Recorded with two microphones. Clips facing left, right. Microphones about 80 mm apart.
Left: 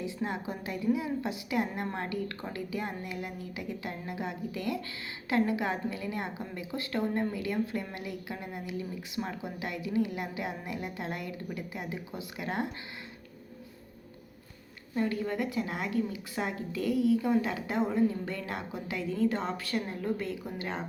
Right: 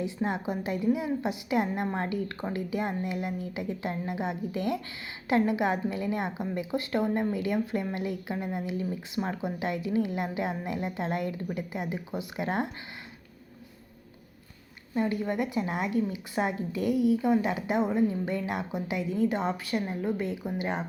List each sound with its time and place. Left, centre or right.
0.0 s a woman's voice: right
14.9 s a woman's voice: right